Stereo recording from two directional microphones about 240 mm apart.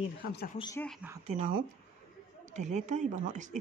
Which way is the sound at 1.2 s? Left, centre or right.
Right.